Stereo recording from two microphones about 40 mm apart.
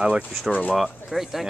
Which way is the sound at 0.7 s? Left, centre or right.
Centre.